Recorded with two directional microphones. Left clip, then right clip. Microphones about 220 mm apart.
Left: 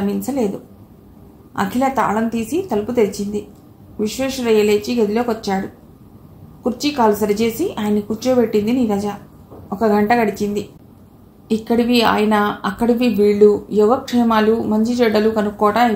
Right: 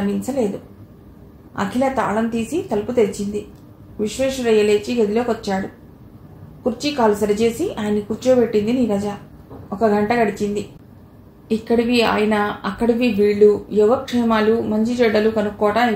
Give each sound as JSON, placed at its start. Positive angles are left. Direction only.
{"t": 0.2, "sound": "a woman's voice", "side_deg": 30}
{"t": 1.5, "sound": "a woman's voice", "side_deg": 30}
{"t": 6.6, "sound": "a woman's voice", "side_deg": 30}